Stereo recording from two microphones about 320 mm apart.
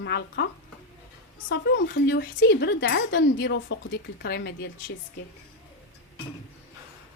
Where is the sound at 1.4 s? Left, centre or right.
Left.